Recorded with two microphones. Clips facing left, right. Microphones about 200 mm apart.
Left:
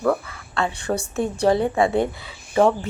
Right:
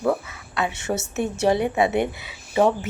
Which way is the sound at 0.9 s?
15° right (ahead or behind).